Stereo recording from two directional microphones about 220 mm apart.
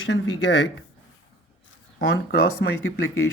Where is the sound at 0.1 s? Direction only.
60° left (ahead or behind).